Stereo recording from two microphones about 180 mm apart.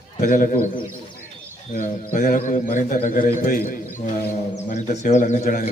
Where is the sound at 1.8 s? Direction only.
45° left (ahead or behind).